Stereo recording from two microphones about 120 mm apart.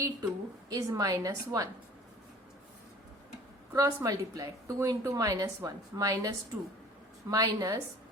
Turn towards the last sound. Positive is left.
turn(degrees=-30)  # may be behind; listen again after turning